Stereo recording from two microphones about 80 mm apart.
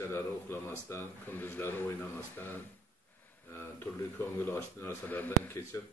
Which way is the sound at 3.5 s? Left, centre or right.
Left.